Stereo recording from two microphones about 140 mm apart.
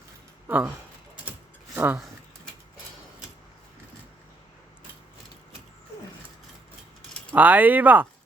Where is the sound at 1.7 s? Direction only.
15° right (ahead or behind).